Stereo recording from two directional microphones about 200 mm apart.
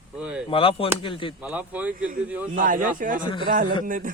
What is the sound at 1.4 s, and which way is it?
Speech, 5° right (ahead or behind).